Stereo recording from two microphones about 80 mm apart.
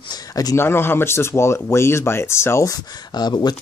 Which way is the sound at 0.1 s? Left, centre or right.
Left.